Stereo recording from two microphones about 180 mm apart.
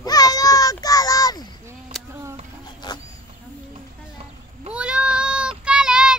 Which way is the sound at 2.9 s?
20° left (ahead or behind).